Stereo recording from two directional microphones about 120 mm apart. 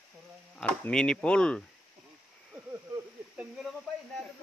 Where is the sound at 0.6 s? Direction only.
5° left (ahead or behind).